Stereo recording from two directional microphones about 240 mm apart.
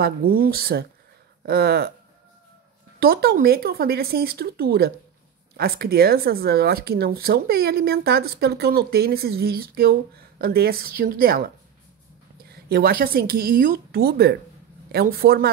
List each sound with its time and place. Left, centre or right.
0.0 s speech: right
3.0 s speech: right